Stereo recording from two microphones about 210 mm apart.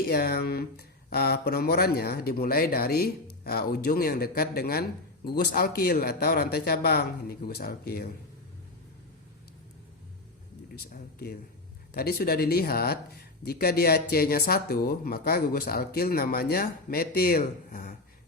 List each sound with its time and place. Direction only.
0.1 s speech: 45° left (ahead or behind)
10.8 s speech: 45° left (ahead or behind)